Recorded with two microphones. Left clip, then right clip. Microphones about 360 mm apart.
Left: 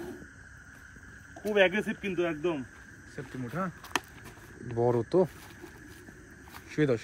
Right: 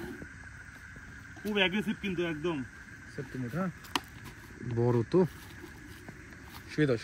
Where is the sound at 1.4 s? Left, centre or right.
Centre.